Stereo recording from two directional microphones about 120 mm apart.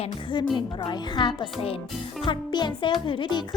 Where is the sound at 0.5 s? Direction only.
35° left (ahead or behind).